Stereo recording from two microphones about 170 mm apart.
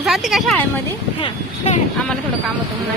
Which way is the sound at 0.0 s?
Centre (ahead or behind).